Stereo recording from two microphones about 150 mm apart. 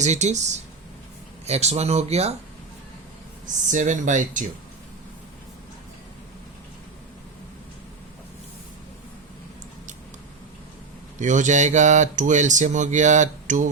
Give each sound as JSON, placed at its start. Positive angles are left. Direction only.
{"t": 0.0, "sound": "speech", "side_deg": -50}
{"t": 1.5, "sound": "speech", "side_deg": -45}
{"t": 3.4, "sound": "speech", "side_deg": -55}
{"t": 11.2, "sound": "speech", "side_deg": -55}